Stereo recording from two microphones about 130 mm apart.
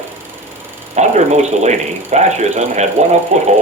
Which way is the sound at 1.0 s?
60° right (ahead or behind).